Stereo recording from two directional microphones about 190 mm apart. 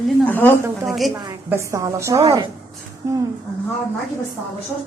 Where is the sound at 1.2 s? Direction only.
20° right (ahead or behind).